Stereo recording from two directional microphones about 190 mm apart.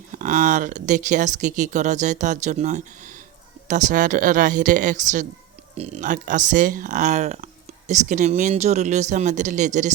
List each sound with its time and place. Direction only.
0.1 s speech: 40° right (ahead or behind)